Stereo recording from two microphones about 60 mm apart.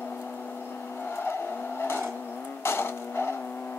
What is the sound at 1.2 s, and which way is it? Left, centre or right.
Vehicle, left.